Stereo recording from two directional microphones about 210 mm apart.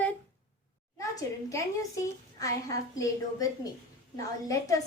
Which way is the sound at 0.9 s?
15° left (ahead or behind).